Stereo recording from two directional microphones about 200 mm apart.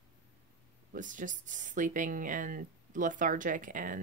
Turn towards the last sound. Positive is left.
turn(degrees=-40)  # may be behind; listen again after turning